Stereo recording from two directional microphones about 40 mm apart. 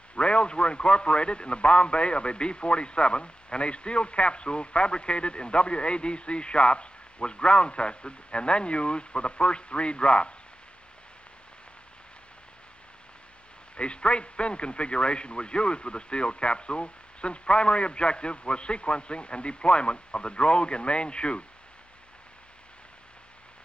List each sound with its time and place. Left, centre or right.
0.1 s a man's voice: left
13.7 s a man's voice: left